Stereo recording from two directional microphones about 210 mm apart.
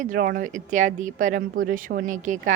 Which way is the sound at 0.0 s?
40° right (ahead or behind).